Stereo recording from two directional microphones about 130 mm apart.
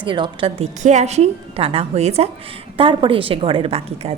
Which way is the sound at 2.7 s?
40° right (ahead or behind).